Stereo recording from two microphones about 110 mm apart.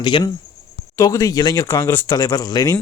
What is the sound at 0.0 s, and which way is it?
Speech, 45° left (ahead or behind).